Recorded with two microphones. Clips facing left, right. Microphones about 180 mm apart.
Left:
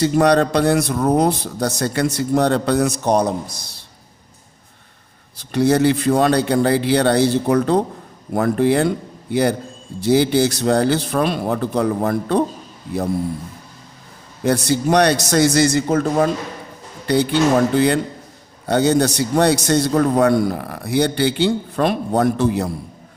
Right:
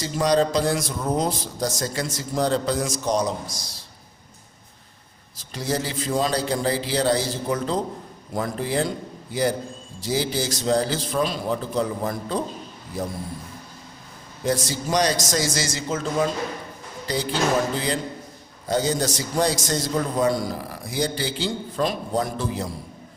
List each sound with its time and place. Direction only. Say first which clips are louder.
0.0 s a man's voice: left 6 dB; 65° left (ahead or behind)
5.4 s a man's voice: left 12 dB; 65° left (ahead or behind)
14.4 s a man's voice: left 7 dB; 65° left (ahead or behind)